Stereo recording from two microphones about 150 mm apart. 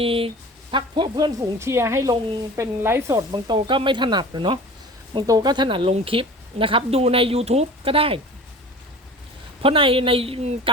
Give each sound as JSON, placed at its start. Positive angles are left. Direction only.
{"t": 0.0, "sound": "a woman's voice", "side_deg": -40}
{"t": 9.6, "sound": "a woman's voice", "side_deg": -35}